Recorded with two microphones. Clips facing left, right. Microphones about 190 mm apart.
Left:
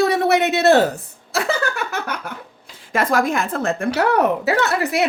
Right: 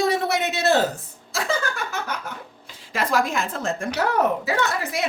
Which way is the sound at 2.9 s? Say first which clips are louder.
Left 4 dB; 55° left (ahead or behind).